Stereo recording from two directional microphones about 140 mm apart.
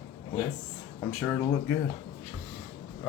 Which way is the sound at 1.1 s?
5° left (ahead or behind).